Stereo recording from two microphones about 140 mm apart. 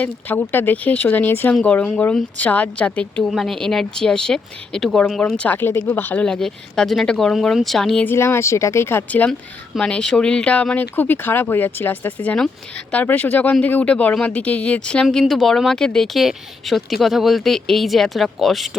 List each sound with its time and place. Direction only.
0.0 s speech: 10° left (ahead or behind)
8.0 s speech: 15° left (ahead or behind); by 18.8 s centre (ahead or behind)